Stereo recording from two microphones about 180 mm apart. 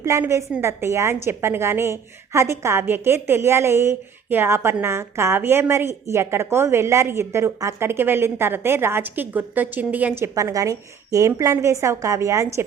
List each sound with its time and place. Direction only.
0.0 s a woman's voice: 15° right (ahead or behind)